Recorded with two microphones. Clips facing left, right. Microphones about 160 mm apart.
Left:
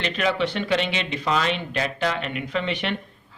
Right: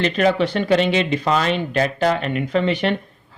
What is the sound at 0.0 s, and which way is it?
A man's voice, 40° right (ahead or behind).